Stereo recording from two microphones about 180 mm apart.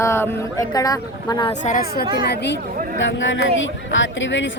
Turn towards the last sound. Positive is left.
turn(degrees=90)